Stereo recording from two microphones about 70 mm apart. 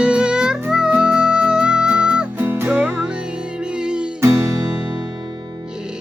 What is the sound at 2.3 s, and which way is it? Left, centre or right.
Music, right.